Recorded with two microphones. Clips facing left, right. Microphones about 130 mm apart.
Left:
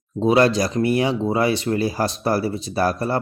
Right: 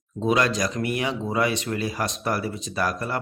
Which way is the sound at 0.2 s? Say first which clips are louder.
Left 6 dB; 30° left (ahead or behind).